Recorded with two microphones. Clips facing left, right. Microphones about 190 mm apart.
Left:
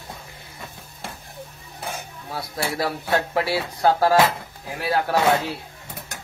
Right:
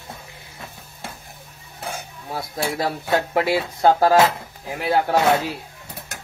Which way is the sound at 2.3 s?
20° right (ahead or behind).